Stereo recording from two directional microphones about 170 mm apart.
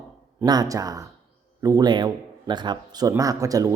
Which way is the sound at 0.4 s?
20° right (ahead or behind).